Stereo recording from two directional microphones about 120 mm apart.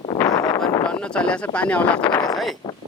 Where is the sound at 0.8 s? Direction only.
5° left (ahead or behind).